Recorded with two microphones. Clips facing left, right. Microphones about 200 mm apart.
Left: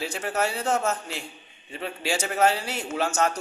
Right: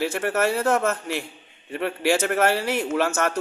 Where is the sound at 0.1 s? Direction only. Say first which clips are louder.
Right 5 dB; 55° right (ahead or behind).